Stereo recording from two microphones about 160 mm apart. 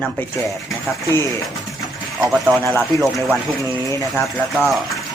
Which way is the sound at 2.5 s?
10° left (ahead or behind).